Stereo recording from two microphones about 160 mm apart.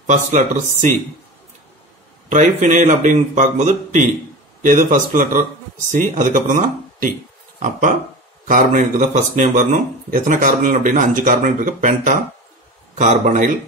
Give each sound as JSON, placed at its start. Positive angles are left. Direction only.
{"t": 0.0, "sound": "speech", "side_deg": -50}
{"t": 2.2, "sound": "speech", "side_deg": -50}
{"t": 8.5, "sound": "speech", "side_deg": -55}